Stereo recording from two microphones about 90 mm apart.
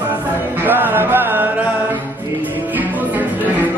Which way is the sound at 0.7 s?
20° right (ahead or behind).